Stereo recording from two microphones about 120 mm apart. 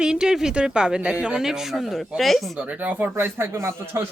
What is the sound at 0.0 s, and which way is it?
Speech, 5° right (ahead or behind).